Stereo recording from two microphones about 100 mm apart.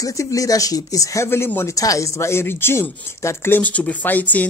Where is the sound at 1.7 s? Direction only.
35° left (ahead or behind).